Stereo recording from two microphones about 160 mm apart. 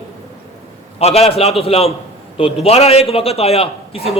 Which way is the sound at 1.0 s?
40° left (ahead or behind).